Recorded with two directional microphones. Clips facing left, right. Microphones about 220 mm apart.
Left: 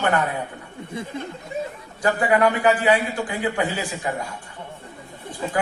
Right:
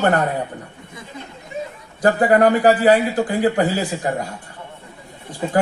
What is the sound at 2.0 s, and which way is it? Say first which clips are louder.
A man's voice: right 5 dB; 35° right (ahead or behind).